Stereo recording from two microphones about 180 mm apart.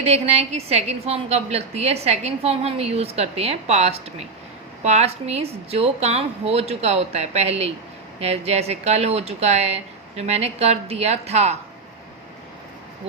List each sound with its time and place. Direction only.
0.0 s a woman's voice: 35° right (ahead or behind)